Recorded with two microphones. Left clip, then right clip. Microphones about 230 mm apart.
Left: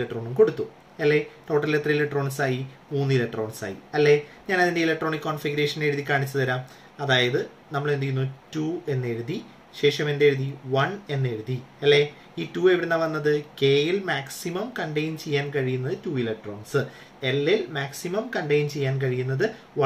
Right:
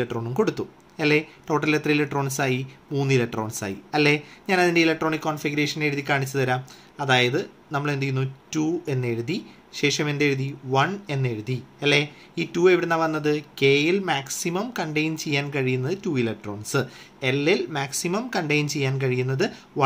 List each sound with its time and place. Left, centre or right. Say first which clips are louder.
0.0 s speech: left 3 dB; right